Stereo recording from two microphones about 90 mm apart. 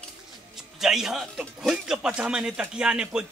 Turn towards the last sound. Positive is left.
turn(degrees=-10)  # may be behind; listen again after turning